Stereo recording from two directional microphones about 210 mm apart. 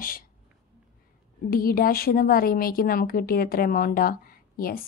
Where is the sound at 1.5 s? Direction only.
45° left (ahead or behind).